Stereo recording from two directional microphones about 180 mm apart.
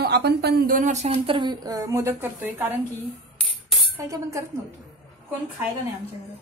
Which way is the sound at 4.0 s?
15° right (ahead or behind).